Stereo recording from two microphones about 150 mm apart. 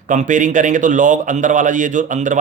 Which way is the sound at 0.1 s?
55° right (ahead or behind).